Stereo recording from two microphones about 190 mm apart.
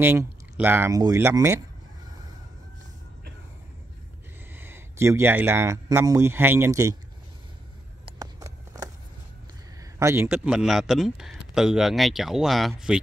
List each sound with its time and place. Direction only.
0.0 s speech: 10° right (ahead or behind)
4.6 s speech: 10° right (ahead or behind)
8.0 s a sound: 20° right (ahead or behind)
9.9 s a man's voice: 15° right (ahead or behind)
10.2 s speech: 5° right (ahead or behind)